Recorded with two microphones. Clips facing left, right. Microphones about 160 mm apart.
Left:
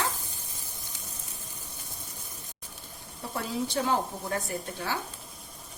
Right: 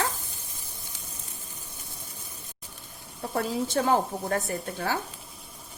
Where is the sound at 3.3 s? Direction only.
50° right (ahead or behind).